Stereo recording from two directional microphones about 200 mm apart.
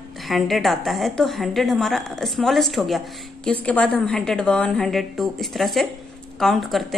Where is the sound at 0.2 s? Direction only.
Centre (ahead or behind).